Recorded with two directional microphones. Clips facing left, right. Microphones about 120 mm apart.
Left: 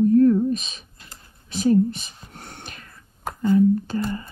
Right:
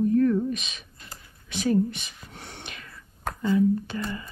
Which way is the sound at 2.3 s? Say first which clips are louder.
Left 1 dB; 45° left (ahead or behind).